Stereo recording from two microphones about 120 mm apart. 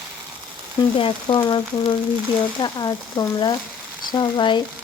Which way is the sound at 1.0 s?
45° left (ahead or behind).